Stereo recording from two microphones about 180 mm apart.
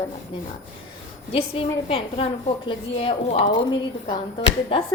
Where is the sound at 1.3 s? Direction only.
30° left (ahead or behind).